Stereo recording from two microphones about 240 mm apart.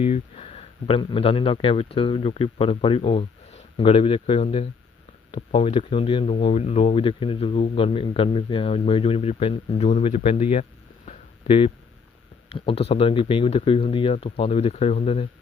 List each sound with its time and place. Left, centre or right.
0.0 s speech: left